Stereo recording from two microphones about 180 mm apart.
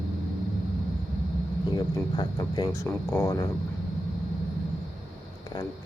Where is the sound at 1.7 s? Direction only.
20° left (ahead or behind).